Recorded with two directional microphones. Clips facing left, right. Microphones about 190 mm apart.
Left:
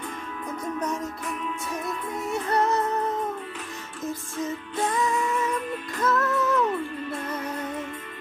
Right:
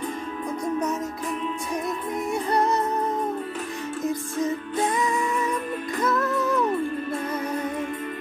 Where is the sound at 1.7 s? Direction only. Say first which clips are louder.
Right 3 dB; 15° right (ahead or behind).